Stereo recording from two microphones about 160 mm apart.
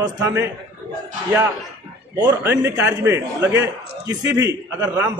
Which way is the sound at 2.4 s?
15° right (ahead or behind).